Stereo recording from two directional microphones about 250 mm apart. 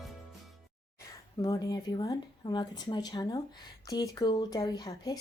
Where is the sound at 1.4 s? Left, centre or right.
Centre.